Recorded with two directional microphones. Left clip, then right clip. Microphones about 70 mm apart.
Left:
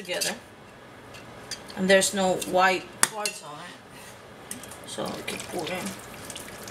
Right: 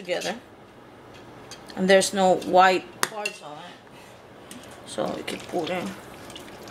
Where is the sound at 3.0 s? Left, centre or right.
Centre.